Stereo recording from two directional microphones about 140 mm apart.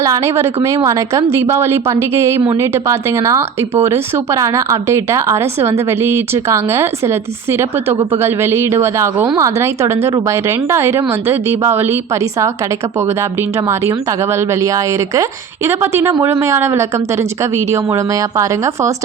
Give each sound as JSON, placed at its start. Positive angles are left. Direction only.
{"t": 0.0, "sound": "speech", "side_deg": -20}
{"t": 13.7, "sound": "speech", "side_deg": -20}